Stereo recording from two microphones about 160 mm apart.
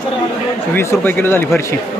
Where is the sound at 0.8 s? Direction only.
15° left (ahead or behind).